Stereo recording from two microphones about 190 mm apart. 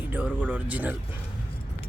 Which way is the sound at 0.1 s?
10° right (ahead or behind).